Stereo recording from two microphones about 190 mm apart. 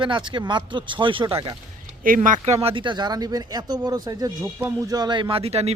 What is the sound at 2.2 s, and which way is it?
Speech, 40° right (ahead or behind).